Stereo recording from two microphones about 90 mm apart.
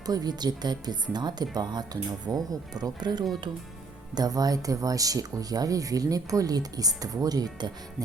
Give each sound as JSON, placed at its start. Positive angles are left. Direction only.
{"t": 0.0, "sound": "speech", "side_deg": -45}